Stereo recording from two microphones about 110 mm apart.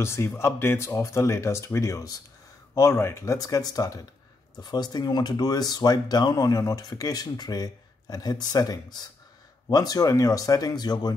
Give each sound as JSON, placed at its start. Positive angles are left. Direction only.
{"t": 0.0, "sound": "speech", "side_deg": 25}